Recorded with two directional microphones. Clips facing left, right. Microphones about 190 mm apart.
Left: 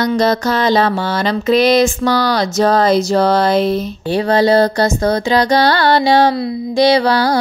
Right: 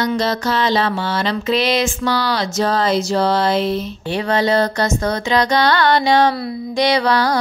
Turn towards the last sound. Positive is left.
turn(degrees=30)  # may be behind; listen again after turning